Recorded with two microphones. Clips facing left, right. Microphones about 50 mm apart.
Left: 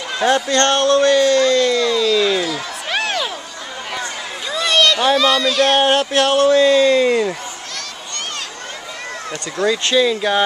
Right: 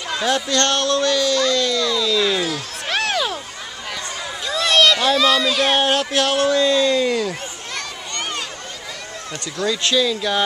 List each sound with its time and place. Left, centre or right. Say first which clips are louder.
0.2 s speech: left 5 dB; left
2.9 s a sound: even; centre
4.5 s a sound: even; centre
5.1 s speech: left 2 dB; centre
5.8 s speech: left 4 dB; centre
9.3 s speech: left 4 dB; left